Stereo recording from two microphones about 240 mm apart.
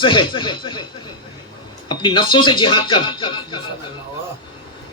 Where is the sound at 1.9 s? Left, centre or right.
Centre.